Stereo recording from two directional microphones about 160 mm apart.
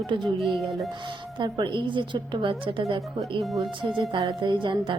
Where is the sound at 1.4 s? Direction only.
30° right (ahead or behind).